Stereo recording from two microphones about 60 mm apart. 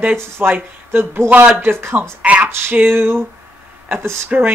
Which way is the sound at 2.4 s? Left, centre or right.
Right.